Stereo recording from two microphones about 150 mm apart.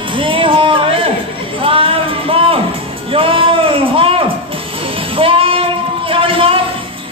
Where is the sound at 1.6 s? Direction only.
35° right (ahead or behind).